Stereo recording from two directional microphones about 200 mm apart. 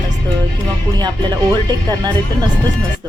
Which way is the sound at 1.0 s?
20° right (ahead or behind).